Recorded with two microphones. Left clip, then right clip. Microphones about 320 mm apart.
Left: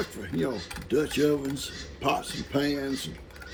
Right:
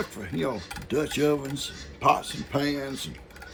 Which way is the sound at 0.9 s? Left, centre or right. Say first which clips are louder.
Even; centre.